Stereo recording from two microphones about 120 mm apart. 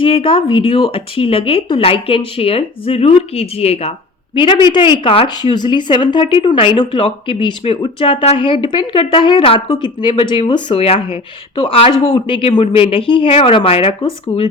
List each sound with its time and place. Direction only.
0.0 s speech: 50° left (ahead or behind)
4.4 s a woman's voice: 40° left (ahead or behind)